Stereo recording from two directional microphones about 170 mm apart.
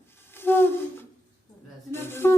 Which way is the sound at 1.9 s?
15° left (ahead or behind).